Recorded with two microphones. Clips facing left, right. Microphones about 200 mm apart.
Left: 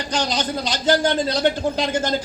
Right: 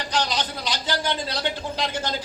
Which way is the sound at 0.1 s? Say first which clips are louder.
Left 4 dB; 50° left (ahead or behind).